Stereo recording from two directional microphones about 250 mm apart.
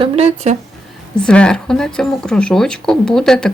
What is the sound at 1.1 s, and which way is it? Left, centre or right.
A woman's voice, centre.